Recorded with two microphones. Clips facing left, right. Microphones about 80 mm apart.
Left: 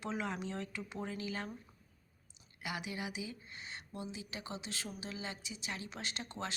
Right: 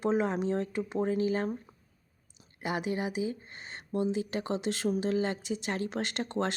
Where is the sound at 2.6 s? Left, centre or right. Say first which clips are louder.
Right 9 dB; right.